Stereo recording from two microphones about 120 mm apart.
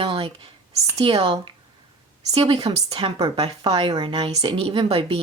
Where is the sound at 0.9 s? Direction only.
50° right (ahead or behind).